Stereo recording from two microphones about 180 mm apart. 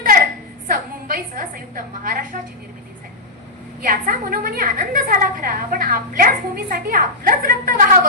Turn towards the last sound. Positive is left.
turn(degrees=-50)  # may be behind; listen again after turning